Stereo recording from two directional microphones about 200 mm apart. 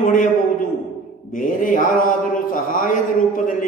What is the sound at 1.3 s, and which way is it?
A man's voice, 40° left (ahead or behind).